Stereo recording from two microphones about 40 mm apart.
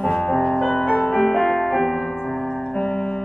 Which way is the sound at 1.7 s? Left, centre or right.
Centre.